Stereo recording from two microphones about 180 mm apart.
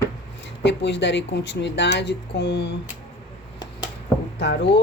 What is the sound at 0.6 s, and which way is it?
Speech, 75° left (ahead or behind).